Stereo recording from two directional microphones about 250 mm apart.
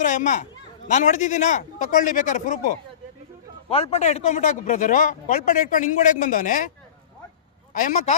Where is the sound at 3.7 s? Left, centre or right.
Left.